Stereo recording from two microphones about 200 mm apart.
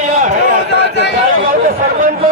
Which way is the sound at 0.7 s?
60° left (ahead or behind).